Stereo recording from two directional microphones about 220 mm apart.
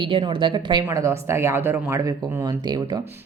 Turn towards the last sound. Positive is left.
turn(degrees=-20)  # may be behind; listen again after turning